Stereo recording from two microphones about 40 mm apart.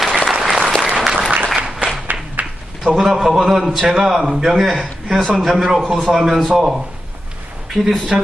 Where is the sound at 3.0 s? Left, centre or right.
Centre.